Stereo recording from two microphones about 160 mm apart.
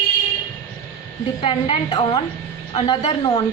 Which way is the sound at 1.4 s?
35° left (ahead or behind).